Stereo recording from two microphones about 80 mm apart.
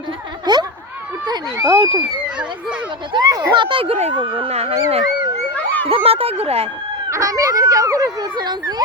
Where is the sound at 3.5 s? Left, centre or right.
Right.